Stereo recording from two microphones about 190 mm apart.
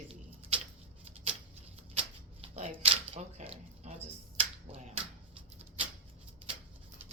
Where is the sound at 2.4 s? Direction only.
35° right (ahead or behind).